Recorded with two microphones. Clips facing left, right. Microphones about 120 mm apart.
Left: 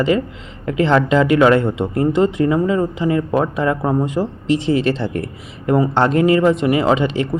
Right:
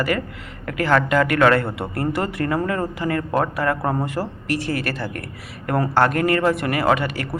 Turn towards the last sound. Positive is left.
turn(degrees=20)  # may be behind; listen again after turning